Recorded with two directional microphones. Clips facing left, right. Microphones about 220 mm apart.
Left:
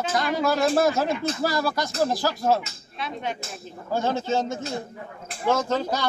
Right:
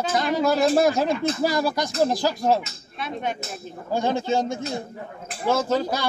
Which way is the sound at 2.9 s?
50° right (ahead or behind).